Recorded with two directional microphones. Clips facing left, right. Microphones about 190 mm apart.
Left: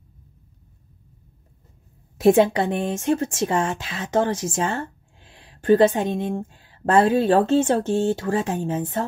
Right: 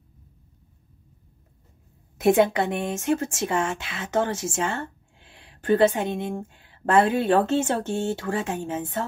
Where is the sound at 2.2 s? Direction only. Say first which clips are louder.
Left 3 dB; 30° left (ahead or behind).